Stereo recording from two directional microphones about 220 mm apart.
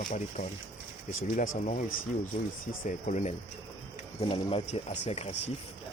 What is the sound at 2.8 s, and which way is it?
Speech, 35° left (ahead or behind).